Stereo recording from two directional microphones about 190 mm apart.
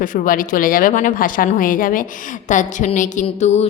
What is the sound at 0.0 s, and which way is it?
A woman's voice, 45° left (ahead or behind).